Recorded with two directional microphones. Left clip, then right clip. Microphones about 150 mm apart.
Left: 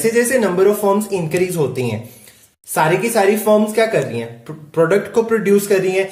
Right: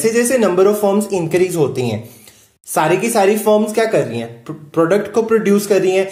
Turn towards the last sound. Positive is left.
turn(degrees=-35)  # may be behind; listen again after turning